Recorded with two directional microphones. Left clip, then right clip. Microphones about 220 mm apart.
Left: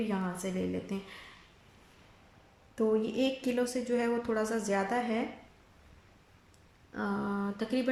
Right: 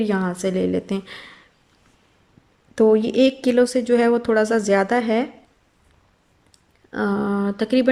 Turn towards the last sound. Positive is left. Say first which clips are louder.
# right 14 dB
turn(degrees=-40)  # may be behind; listen again after turning